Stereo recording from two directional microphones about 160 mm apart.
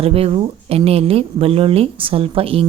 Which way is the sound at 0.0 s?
35° right (ahead or behind).